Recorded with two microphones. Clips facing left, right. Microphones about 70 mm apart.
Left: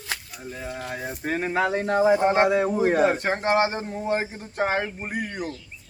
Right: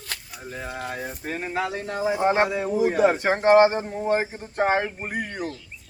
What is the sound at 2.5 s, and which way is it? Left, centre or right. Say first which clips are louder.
Speech: left 2 dB; left.